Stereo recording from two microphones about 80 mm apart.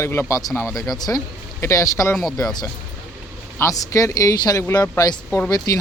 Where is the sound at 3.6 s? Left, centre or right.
Left.